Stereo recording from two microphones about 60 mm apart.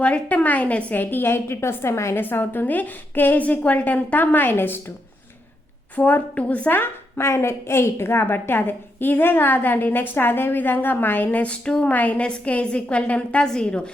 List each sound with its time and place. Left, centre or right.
0.0 s a woman's voice: left
2.1 s a woman's voice: left
6.0 s a woman's voice: left
7.2 s a woman's voice: left; by 13.9 s centre